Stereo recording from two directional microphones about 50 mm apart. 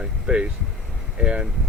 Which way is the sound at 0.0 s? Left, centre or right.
Centre.